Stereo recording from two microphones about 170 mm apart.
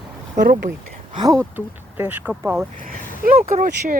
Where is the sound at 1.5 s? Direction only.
10° right (ahead or behind).